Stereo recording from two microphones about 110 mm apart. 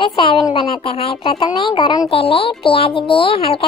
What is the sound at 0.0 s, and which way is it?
A child's voice, 50° left (ahead or behind).